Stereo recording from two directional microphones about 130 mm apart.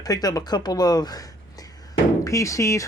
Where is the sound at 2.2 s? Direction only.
25° left (ahead or behind).